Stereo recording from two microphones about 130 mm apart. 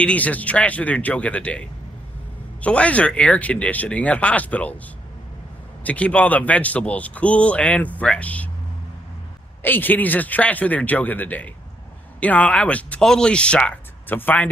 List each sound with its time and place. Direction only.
0.0 s speech: 10° left (ahead or behind)
2.6 s speech: 10° left (ahead or behind)
5.9 s speech: 10° left (ahead or behind)
9.6 s speech: 15° left (ahead or behind)